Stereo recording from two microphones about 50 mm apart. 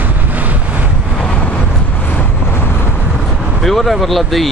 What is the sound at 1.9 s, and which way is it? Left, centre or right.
Vehicle, left.